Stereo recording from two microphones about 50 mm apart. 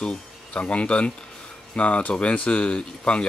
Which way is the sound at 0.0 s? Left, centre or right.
Left.